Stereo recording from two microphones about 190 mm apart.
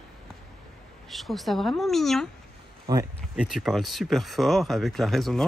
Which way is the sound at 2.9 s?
20° right (ahead or behind).